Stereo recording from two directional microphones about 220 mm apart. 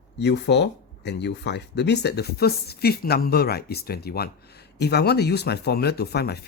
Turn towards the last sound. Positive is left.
turn(degrees=45)  # may be behind; listen again after turning